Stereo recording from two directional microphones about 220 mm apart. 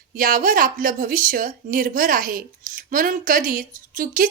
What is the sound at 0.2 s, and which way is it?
A woman's voice, 40° right (ahead or behind).